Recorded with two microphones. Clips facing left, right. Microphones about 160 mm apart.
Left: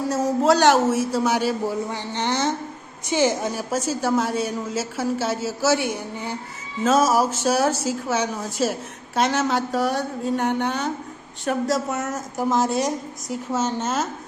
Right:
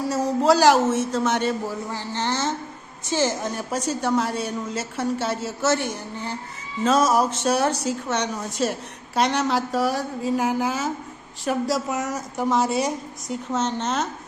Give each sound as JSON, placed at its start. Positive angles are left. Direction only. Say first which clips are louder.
{"t": 0.0, "sound": "speech", "louder": "left 1 dB", "side_deg": 0}
{"t": 1.9, "sound": "speech", "louder": "left 1 dB", "side_deg": 20}